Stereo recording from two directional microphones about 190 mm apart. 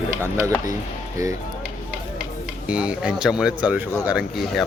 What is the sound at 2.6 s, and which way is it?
Speech, 5° right (ahead or behind).